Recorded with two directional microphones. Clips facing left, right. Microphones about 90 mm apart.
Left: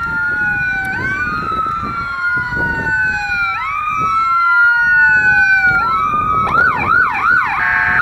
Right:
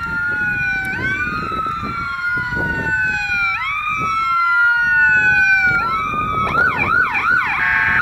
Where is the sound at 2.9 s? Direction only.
20° left (ahead or behind).